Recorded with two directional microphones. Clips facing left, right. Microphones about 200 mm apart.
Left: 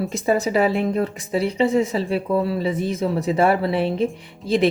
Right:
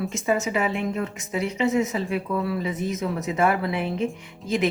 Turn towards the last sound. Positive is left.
turn(degrees=30)  # may be behind; listen again after turning